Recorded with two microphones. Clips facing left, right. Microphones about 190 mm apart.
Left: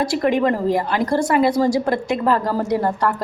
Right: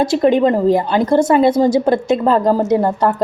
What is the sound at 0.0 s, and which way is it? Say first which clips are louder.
A woman's voice: right 5 dB; 25° right (ahead or behind).